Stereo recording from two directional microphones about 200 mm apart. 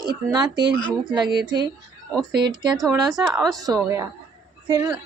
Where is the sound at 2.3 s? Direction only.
55° right (ahead or behind).